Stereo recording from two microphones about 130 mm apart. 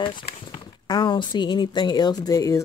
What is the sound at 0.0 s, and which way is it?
Speech, 40° left (ahead or behind).